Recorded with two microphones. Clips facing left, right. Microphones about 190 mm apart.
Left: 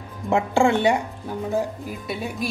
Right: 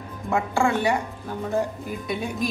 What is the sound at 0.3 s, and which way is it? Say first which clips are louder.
Speech: left 4 dB; 25° left (ahead or behind).